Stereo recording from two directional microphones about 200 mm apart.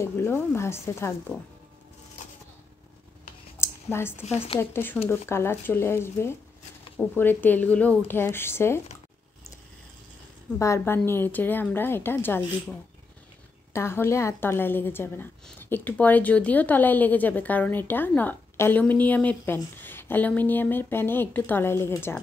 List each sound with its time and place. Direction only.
0.0 s a woman's voice: 10° left (ahead or behind)
3.5 s a sound: 10° left (ahead or behind)
4.2 s speech: 30° left (ahead or behind)
4.6 s a woman's voice: 10° left (ahead or behind)
10.6 s a woman's voice: 15° left (ahead or behind)
13.7 s a woman's voice: 15° left (ahead or behind)